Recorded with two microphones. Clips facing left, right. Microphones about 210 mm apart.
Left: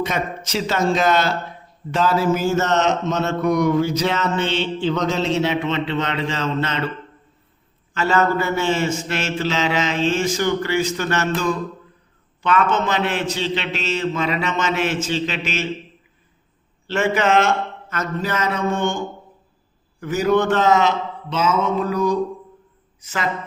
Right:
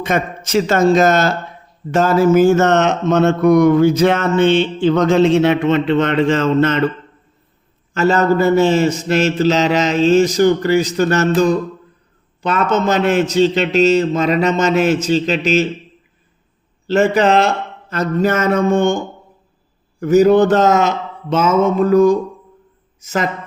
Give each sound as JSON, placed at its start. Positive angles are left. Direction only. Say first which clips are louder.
{"t": 0.0, "sound": "speech", "louder": "right 5 dB", "side_deg": -50}
{"t": 7.9, "sound": "mantra", "louder": "right 5 dB", "side_deg": -40}
{"t": 16.8, "sound": "a man's voice", "louder": "right 6 dB", "side_deg": -40}
{"t": 18.2, "sound": "speech", "louder": "right 8 dB", "side_deg": -50}
{"t": 20.0, "sound": "a woman's voice", "louder": "right 8 dB", "side_deg": -40}